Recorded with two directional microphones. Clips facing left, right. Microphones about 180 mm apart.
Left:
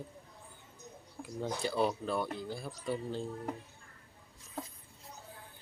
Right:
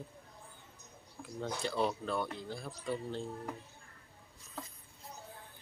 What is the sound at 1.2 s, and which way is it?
Speech, 5° left (ahead or behind).